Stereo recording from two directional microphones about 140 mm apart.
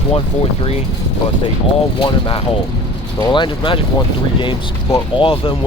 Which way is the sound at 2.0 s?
40° left (ahead or behind).